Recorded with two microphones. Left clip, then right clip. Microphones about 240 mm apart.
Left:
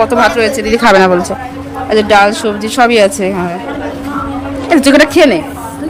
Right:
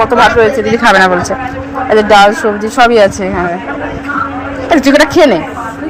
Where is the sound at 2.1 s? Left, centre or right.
Centre.